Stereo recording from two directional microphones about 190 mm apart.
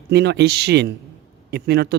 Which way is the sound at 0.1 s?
65° right (ahead or behind).